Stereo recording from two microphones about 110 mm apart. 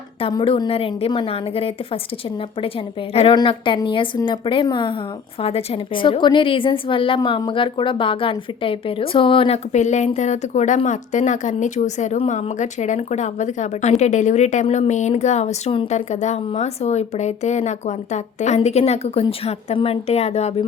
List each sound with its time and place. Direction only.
0.2 s a woman's voice: 50° left (ahead or behind)
3.3 s a woman's voice: 45° left (ahead or behind)
5.4 s a woman's voice: 65° left (ahead or behind)
9.7 s speech: 90° left